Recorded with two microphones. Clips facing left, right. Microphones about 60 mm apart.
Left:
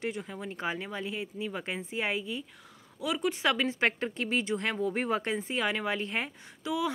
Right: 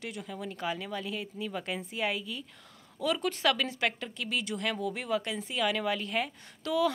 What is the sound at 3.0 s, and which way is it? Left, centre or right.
Speech, centre.